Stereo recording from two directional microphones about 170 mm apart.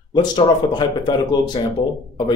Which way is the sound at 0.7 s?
25° left (ahead or behind).